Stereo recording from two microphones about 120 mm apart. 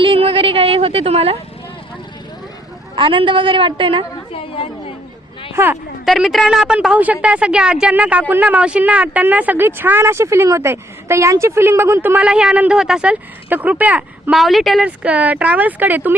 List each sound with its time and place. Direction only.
0.0 s a woman's voice: 50° right (ahead or behind)
2.9 s a woman's voice: 45° right (ahead or behind)
4.3 s a woman's voice: 50° left (ahead or behind)
6.1 s speech: centre (ahead or behind)
14.3 s speech: centre (ahead or behind)
14.8 s speech: 10° right (ahead or behind)